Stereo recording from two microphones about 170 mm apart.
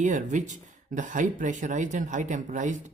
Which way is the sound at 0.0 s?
45° right (ahead or behind).